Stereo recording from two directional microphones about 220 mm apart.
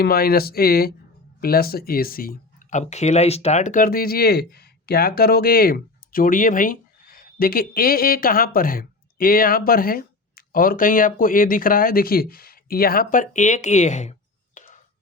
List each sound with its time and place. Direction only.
0.0 s speech: 45° left (ahead or behind)